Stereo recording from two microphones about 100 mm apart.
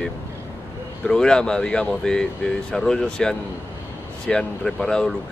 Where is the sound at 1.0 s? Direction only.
10° left (ahead or behind).